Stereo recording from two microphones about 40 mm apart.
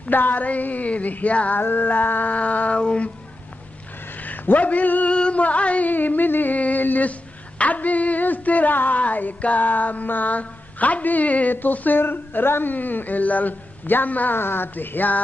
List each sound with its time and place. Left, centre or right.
0.1 s speech: left
1.6 s speech: left
2.3 s a sound: left
2.8 s music: left
4.2 s speech: left
5.1 s music: left
5.4 s a sound: left
5.9 s speech: left
7.1 s a sound: left
11.7 s speech: left
12.0 s speech: left
12.7 s speech: left
14.3 s speech: left